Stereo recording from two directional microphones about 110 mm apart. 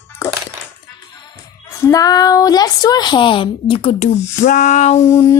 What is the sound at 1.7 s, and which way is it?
A woman's voice, 30° left (ahead or behind).